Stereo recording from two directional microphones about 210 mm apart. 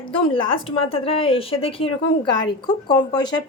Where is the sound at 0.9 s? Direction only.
25° left (ahead or behind).